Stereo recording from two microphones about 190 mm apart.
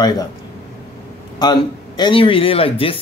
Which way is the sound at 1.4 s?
20° left (ahead or behind).